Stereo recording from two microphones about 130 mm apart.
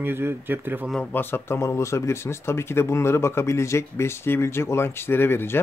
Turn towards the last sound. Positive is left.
turn(degrees=15)  # may be behind; listen again after turning